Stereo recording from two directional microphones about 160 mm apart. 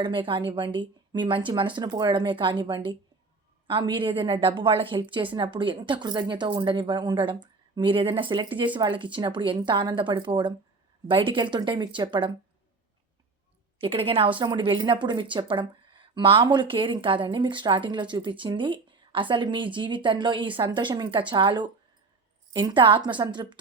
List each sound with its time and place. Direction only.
0.0 s a woman's voice: 30° right (ahead or behind)
13.7 s a woman's voice: 35° right (ahead or behind)